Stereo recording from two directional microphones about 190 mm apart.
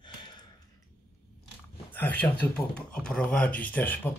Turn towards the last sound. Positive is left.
turn(degrees=10)  # may be behind; listen again after turning